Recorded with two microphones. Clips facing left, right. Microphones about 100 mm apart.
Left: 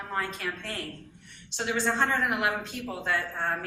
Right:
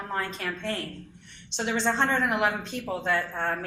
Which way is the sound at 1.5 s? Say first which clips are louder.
Right 2 dB; 20° right (ahead or behind).